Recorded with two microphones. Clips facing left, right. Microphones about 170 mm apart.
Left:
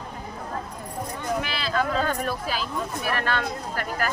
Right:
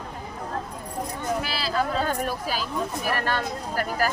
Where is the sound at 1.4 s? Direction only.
35° right (ahead or behind).